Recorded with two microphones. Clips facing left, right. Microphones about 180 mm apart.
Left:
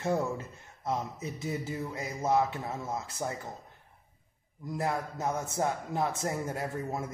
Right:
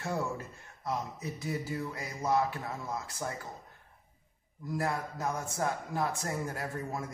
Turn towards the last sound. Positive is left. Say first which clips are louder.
# left 3 dB
turn(degrees=25)  # may be behind; listen again after turning